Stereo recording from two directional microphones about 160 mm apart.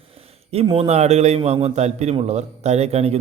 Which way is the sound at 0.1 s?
40° right (ahead or behind).